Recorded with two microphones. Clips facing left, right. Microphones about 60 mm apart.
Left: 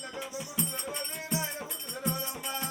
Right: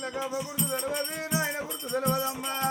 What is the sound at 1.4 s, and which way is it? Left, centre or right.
Music, right.